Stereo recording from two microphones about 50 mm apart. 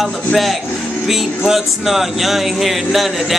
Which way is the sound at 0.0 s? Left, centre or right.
Centre.